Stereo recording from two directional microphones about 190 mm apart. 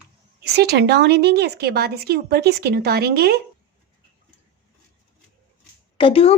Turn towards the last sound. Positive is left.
turn(degrees=30)  # may be behind; listen again after turning